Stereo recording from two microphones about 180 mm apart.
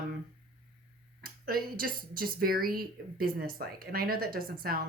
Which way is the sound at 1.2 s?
55° right (ahead or behind).